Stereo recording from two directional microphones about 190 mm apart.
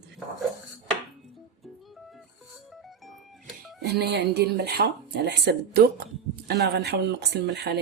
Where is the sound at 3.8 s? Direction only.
60° right (ahead or behind).